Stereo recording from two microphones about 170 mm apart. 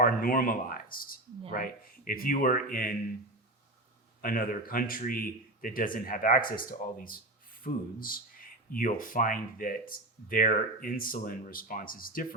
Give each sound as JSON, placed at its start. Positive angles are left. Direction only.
{"t": 0.0, "sound": "speech", "side_deg": 55}
{"t": 4.2, "sound": "speech", "side_deg": 60}